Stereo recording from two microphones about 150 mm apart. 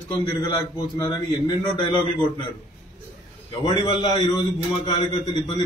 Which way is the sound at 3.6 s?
40° left (ahead or behind).